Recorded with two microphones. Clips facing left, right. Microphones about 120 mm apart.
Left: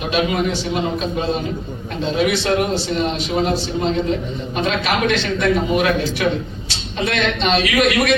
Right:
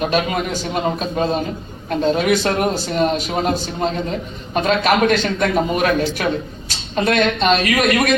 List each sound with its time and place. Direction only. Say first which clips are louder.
0.0 s a man's voice: even; 45° right (ahead or behind)